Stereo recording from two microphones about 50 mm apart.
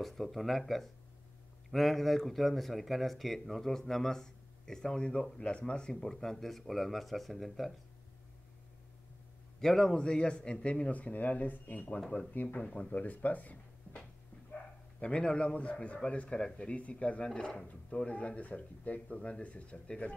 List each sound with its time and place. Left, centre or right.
0.0 s speech: centre
9.6 s a man's voice: centre; by 12.0 s left
12.1 s a man's voice: left
15.0 s a man's voice: left
18.1 s a man's voice: left